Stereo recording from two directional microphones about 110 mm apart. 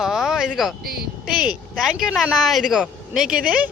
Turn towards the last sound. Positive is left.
turn(degrees=-10)  # may be behind; listen again after turning